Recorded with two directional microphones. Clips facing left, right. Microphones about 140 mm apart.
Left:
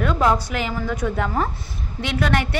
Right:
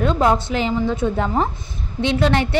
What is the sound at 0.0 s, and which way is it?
A woman's voice, 25° right (ahead or behind).